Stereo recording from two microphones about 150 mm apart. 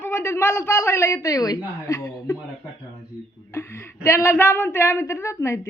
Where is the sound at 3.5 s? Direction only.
20° left (ahead or behind).